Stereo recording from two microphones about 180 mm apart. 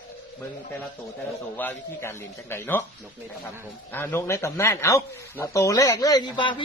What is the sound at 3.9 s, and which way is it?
A man's voice, 10° left (ahead or behind).